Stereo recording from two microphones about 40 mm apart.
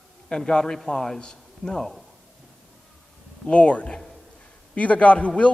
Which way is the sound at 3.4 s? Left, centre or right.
Left.